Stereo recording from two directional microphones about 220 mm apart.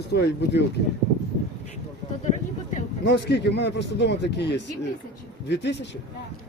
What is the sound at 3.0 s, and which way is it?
A man's voice, 50° left (ahead or behind).